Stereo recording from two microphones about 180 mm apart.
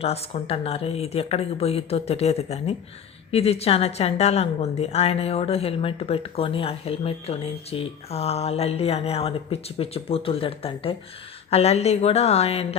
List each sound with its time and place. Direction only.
0.0 s a woman's voice: 35° left (ahead or behind)